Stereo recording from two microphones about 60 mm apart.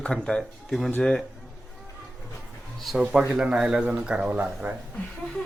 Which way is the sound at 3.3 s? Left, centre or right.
Centre.